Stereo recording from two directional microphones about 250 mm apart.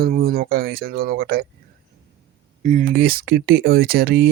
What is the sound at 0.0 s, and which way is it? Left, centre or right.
Speech, right.